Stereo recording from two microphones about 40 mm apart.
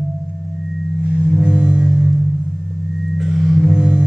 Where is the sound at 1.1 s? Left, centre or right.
Centre.